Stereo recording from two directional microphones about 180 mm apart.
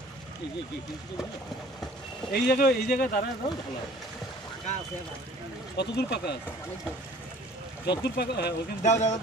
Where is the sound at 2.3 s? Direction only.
60° left (ahead or behind).